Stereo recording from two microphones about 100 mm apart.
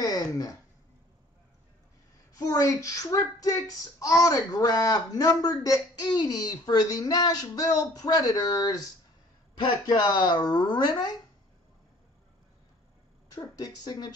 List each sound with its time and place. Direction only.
0.0 s a sound: 40° left (ahead or behind)
2.3 s speech: 35° left (ahead or behind)
13.3 s speech: 40° left (ahead or behind)